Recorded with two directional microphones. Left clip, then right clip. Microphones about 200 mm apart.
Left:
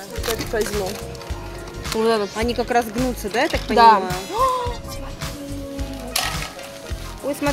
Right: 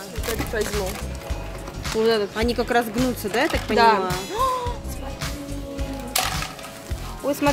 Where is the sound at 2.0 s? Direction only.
30° left (ahead or behind).